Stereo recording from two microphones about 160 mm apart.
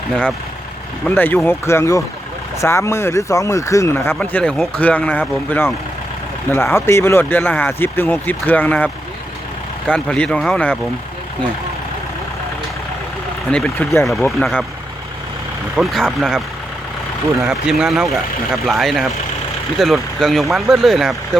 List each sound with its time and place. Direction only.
0.1 s speech: 5° left (ahead or behind)
13.5 s speech: 5° left (ahead or behind)
15.7 s speech: centre (ahead or behind)
17.4 s speech: 5° right (ahead or behind)